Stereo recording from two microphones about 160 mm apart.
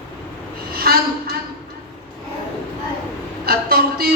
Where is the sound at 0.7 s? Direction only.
70° right (ahead or behind).